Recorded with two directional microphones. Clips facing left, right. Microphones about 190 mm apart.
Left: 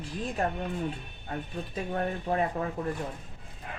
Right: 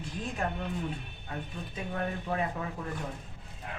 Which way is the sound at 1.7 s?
40° left (ahead or behind).